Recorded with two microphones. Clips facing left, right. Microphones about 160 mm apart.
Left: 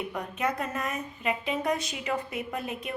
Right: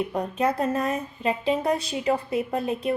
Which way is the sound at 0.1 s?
30° right (ahead or behind).